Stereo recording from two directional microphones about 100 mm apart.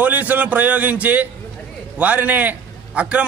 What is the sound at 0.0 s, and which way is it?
A man's voice, 15° right (ahead or behind).